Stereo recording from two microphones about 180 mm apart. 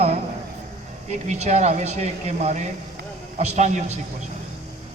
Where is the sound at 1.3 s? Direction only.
40° right (ahead or behind).